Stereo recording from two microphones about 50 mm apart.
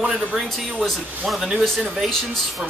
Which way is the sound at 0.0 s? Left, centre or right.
Centre.